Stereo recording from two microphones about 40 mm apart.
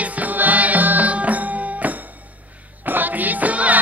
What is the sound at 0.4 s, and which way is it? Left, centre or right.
Music, right.